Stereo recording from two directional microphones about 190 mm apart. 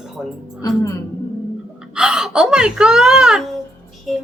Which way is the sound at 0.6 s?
20° left (ahead or behind).